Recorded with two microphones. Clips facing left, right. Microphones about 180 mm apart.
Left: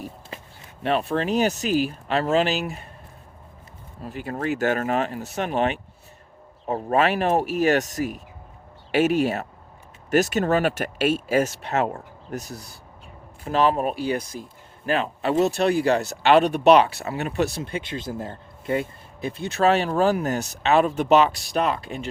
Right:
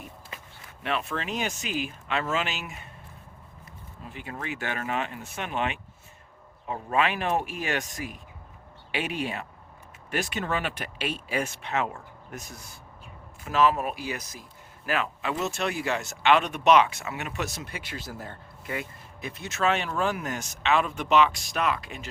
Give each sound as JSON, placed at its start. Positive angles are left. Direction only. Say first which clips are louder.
{"t": 0.8, "sound": "speech", "louder": "left 8 dB", "side_deg": 35}
{"t": 4.0, "sound": "speech", "louder": "left 9 dB", "side_deg": 40}